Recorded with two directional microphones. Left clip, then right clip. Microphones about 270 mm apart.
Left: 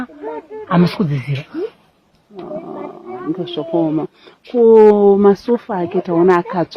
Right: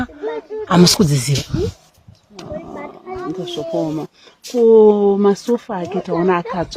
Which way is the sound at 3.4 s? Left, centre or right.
Left.